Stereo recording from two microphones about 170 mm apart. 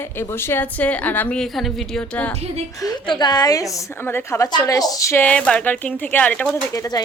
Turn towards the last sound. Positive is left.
turn(degrees=20)  # may be behind; listen again after turning